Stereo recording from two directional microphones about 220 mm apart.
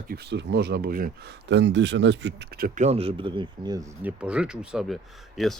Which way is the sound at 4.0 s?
5° right (ahead or behind).